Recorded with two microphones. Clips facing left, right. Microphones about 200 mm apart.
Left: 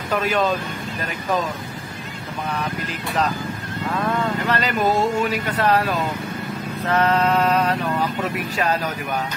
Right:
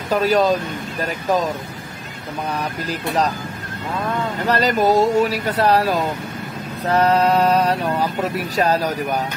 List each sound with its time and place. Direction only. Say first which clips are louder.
0.1 s speech: right 4 dB; 40° right (ahead or behind)
4.5 s speech: right 6 dB; 40° right (ahead or behind)